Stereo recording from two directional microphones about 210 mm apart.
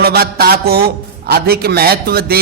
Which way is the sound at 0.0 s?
50° right (ahead or behind).